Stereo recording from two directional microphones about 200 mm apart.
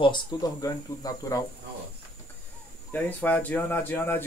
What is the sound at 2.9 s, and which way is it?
Speech, 10° left (ahead or behind).